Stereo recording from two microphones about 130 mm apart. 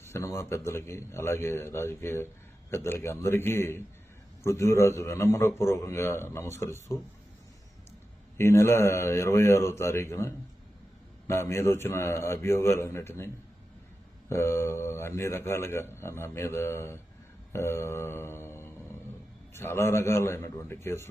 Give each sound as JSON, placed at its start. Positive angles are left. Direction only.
{"t": 0.0, "sound": "a man's voice", "side_deg": 20}
{"t": 8.4, "sound": "a man's voice", "side_deg": 20}
{"t": 17.5, "sound": "mantra", "side_deg": 20}
{"t": 19.5, "sound": "a man's voice", "side_deg": 20}